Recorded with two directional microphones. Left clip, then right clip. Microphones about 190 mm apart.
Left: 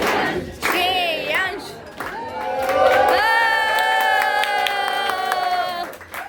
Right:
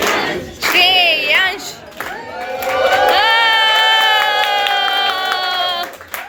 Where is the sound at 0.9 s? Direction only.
25° right (ahead or behind).